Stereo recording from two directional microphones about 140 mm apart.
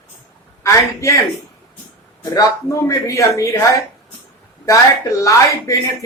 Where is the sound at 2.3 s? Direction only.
25° left (ahead or behind).